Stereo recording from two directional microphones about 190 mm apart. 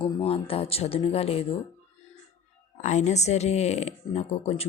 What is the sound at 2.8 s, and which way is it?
Speech, 40° left (ahead or behind).